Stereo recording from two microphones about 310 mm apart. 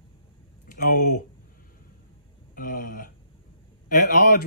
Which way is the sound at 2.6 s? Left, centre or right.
Left.